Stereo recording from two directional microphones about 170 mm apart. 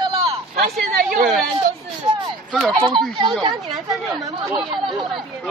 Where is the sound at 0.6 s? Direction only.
55° right (ahead or behind).